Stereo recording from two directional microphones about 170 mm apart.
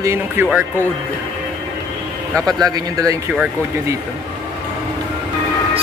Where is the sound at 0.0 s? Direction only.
15° right (ahead or behind).